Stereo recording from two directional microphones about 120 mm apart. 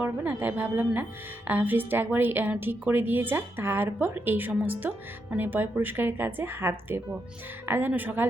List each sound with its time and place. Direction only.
0.0 s a woman's voice: 15° right (ahead or behind)